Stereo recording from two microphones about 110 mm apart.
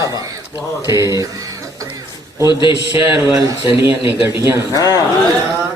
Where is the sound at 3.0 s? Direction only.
25° right (ahead or behind).